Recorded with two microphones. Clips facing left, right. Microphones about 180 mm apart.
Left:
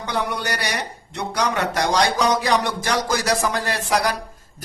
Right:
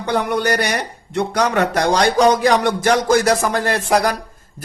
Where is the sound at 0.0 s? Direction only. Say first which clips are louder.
Right 6 dB; 55° right (ahead or behind).